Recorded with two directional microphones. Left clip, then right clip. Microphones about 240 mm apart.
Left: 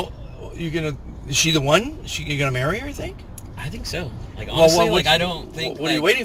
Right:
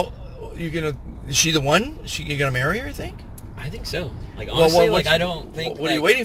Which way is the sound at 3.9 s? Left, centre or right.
Centre.